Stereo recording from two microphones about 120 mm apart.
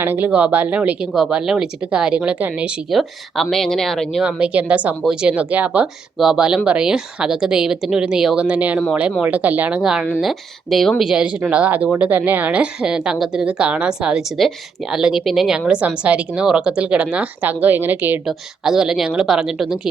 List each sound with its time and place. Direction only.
0.0 s a woman's voice: 15° right (ahead or behind); by 4.2 s centre (ahead or behind)
4.2 s a woman's voice: 10° right (ahead or behind)
18.3 s a woman's voice: 5° right (ahead or behind)